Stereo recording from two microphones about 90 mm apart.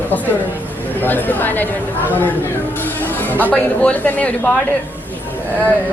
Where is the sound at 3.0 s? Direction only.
20° left (ahead or behind).